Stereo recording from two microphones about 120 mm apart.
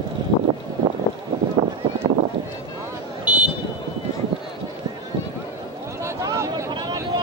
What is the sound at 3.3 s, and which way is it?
Vehicle, 15° right (ahead or behind).